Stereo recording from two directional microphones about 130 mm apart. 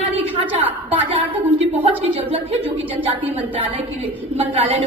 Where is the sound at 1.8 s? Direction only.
50° right (ahead or behind).